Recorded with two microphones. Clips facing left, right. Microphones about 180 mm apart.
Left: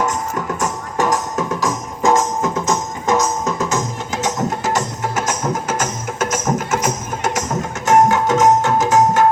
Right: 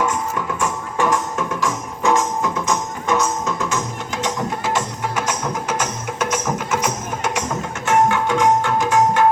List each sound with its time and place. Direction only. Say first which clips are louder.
0.0 s music: left 1 dB; 40° left (ahead or behind)